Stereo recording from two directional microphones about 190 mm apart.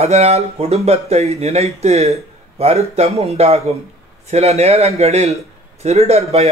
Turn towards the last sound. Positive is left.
turn(degrees=-35)  # may be behind; listen again after turning